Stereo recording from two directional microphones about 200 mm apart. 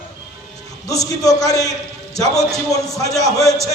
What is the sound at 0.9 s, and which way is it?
Speech, 15° left (ahead or behind).